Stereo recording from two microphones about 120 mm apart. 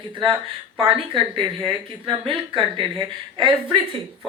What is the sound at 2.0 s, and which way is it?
Speech, 45° right (ahead or behind).